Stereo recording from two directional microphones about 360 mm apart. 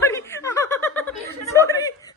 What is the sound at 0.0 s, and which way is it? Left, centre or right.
Chuckle, centre.